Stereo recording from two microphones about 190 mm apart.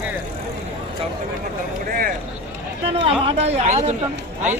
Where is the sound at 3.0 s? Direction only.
30° right (ahead or behind).